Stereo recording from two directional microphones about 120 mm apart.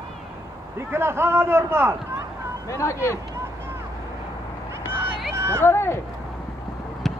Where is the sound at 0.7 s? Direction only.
20° right (ahead or behind).